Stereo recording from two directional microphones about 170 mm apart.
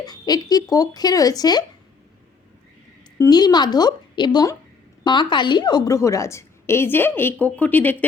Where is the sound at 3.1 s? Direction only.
20° left (ahead or behind).